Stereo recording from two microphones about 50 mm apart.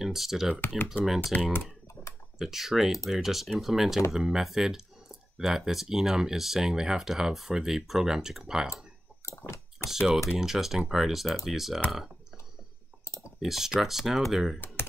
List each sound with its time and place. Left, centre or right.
0.0 s speech: centre
2.3 s speech: centre
9.4 s a sound: left
9.8 s speech: centre
13.0 s clicking: left
13.4 s speech: centre